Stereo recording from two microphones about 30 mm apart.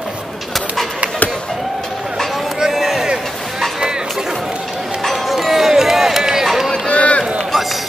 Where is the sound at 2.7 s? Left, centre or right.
Centre.